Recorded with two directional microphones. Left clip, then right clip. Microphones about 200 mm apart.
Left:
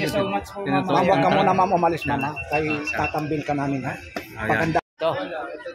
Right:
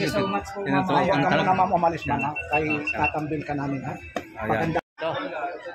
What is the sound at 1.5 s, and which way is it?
Speech, 50° left (ahead or behind).